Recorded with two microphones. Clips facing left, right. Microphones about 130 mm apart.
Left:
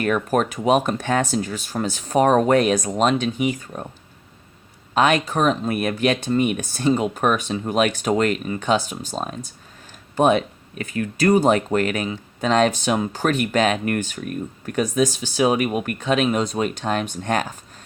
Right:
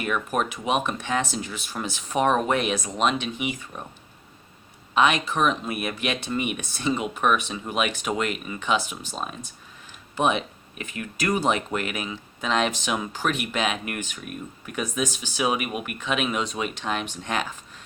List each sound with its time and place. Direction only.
0.0 s speech: 40° left (ahead or behind)
4.9 s speech: 45° left (ahead or behind)